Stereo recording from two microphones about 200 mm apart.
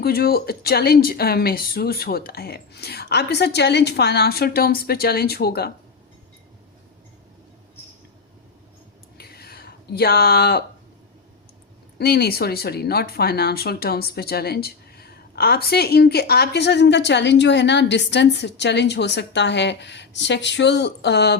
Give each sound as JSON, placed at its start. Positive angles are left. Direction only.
{"t": 0.0, "sound": "speech", "side_deg": 50}
{"t": 9.1, "sound": "a sound", "side_deg": 50}
{"t": 11.9, "sound": "speech", "side_deg": 50}